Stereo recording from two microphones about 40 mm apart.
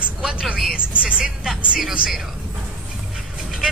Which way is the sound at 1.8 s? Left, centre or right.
Centre.